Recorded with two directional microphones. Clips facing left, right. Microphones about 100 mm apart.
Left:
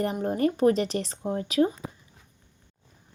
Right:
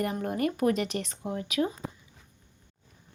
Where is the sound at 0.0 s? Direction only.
30° left (ahead or behind).